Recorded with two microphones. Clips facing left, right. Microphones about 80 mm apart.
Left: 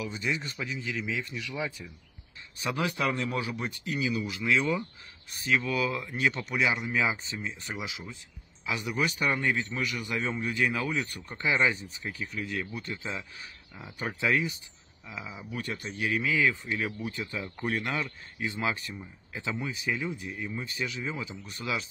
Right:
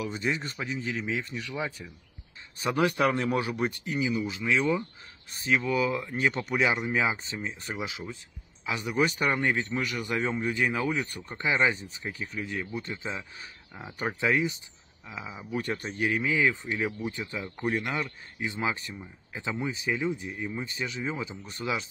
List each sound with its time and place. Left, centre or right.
0.0 s speech: right
2.6 s speech: right
3.8 s speech: right
10.4 s speech: right
13.7 s speech: right
15.0 s speech: centre
15.6 s speech: right
16.1 s speech: right